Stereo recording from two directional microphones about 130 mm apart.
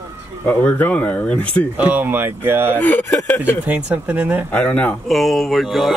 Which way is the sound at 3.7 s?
10° right (ahead or behind).